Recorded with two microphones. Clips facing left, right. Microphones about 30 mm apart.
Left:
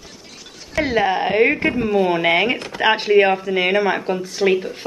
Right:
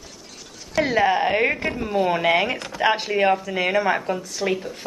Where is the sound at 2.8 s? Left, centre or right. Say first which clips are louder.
Left 5 dB; left.